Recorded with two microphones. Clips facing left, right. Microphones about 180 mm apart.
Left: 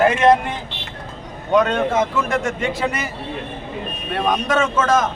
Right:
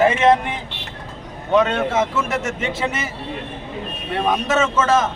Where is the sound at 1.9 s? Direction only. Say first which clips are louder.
Left 1 dB; 5° right (ahead or behind).